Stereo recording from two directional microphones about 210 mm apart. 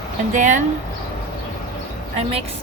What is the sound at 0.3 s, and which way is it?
Speech, 35° right (ahead or behind).